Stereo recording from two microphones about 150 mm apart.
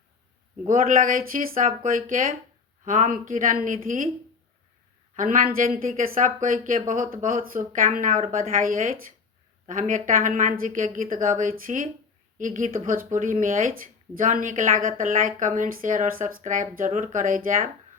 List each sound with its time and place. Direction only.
0.7 s speech: 65° right (ahead or behind)
5.1 s speech: 60° right (ahead or behind)